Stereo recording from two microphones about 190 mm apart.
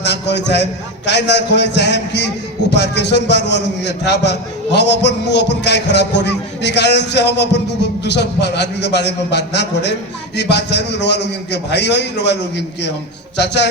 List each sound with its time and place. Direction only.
0.0 s a man's voice: 65° left (ahead or behind)